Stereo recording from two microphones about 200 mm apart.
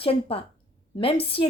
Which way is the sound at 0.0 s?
30° left (ahead or behind).